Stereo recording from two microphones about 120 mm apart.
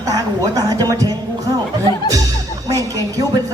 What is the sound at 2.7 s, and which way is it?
Music, 30° right (ahead or behind).